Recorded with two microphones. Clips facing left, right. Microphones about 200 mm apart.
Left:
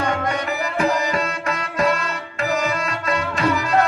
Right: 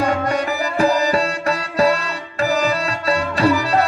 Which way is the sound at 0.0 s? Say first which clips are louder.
Right 4 dB; 35° right (ahead or behind).